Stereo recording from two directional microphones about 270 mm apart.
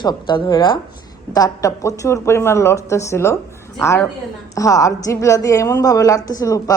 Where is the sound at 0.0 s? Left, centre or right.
Centre.